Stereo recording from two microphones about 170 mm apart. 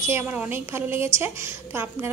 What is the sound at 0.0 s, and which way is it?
A woman's voice, 15° right (ahead or behind).